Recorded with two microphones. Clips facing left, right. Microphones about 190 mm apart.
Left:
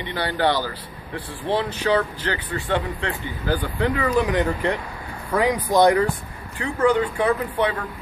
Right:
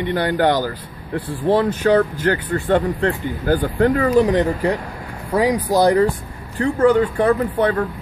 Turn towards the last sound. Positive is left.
turn(degrees=-50)  # may be behind; listen again after turning